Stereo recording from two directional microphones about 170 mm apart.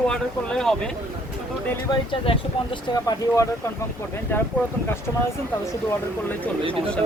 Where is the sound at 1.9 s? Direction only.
30° left (ahead or behind); by 4.5 s 10° left (ahead or behind).